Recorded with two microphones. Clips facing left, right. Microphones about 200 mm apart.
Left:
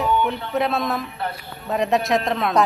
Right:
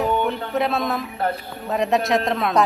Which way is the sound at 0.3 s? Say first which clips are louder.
Even; centre (ahead or behind).